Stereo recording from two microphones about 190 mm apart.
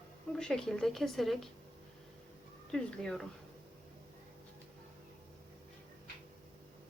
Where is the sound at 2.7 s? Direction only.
5° left (ahead or behind).